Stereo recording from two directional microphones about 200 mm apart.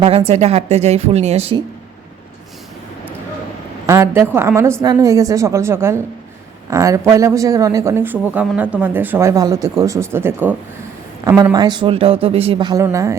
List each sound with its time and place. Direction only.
0.0 s a woman's voice: 30° right (ahead or behind)
3.8 s speech: 15° right (ahead or behind)